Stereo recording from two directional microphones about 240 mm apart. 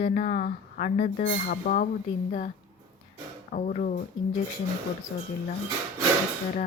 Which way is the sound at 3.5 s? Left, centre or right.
Left.